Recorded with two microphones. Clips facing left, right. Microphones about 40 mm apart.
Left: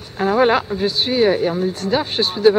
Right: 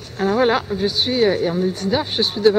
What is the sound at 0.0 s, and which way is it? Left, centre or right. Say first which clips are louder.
Speech: left 2 dB; centre.